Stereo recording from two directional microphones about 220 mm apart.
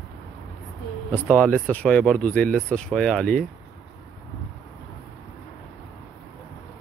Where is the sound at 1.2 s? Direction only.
5° left (ahead or behind).